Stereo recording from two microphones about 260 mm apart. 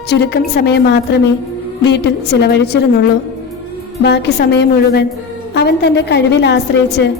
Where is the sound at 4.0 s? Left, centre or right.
Left.